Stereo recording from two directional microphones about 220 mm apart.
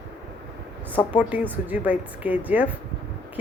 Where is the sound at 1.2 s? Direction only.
5° right (ahead or behind).